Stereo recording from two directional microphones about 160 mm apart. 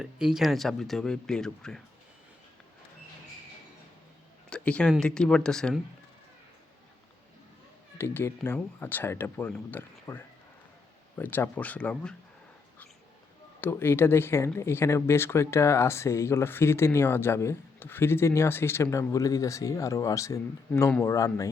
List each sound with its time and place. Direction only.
0.0 s speech: 5° right (ahead or behind)
4.4 s speech: 5° left (ahead or behind)
7.9 s speech: 15° left (ahead or behind)
13.6 s speech: 15° left (ahead or behind)